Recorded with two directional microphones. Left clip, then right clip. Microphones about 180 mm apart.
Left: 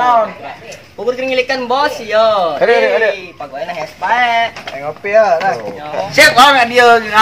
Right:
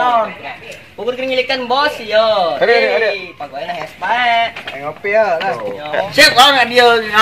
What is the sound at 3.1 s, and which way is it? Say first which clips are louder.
Speech: left 2 dB; 10° left (ahead or behind).